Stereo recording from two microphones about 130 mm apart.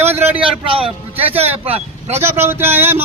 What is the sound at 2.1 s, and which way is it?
Speech, 20° right (ahead or behind).